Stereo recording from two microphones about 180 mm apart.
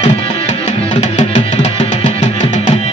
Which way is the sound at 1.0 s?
35° left (ahead or behind).